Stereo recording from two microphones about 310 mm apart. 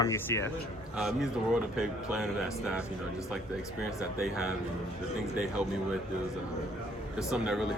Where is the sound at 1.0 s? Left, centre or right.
Centre.